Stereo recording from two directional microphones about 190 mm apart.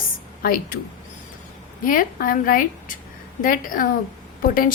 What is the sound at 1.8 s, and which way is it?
A woman's voice, 45° left (ahead or behind).